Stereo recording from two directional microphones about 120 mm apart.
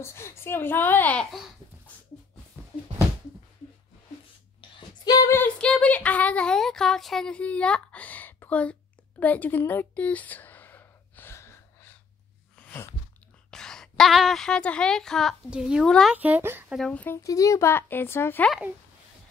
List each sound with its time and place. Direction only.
0.0 s a woman's voice: 20° left (ahead or behind)
2.6 s a sound: 15° right (ahead or behind)
4.6 s a sound: 40° left (ahead or behind)
5.3 s speech: 10° left (ahead or behind)
9.2 s a sound: 15° left (ahead or behind)
13.5 s a woman's voice: 5° left (ahead or behind)
15.5 s speech: 5° right (ahead or behind)
16.6 s speech: centre (ahead or behind)
16.9 s a woman's voice: 15° left (ahead or behind)
17.2 s speech: 25° left (ahead or behind)